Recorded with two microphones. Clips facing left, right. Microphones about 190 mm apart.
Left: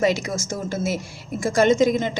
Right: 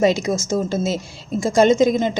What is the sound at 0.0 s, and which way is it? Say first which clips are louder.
A woman's voice: right 4 dB; 20° right (ahead or behind).